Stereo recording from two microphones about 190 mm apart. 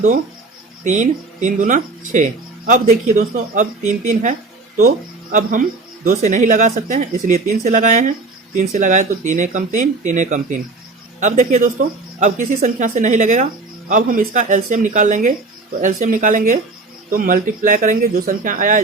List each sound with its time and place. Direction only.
0.9 s speech: 40° right (ahead or behind)